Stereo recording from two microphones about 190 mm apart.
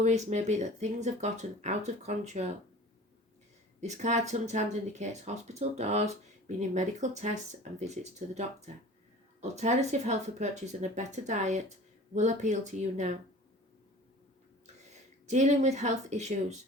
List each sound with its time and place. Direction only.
0.0 s speech: 35° right (ahead or behind)
3.8 s speech: 35° right (ahead or behind)
14.8 s speech: 35° right (ahead or behind)